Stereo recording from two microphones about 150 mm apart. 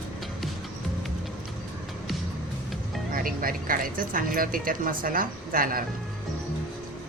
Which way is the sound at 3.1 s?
70° right (ahead or behind).